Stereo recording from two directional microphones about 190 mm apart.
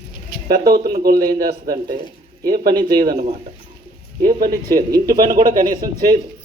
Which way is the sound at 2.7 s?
20° right (ahead or behind).